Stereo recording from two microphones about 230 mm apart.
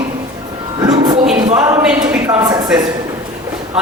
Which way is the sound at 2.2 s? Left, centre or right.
Centre.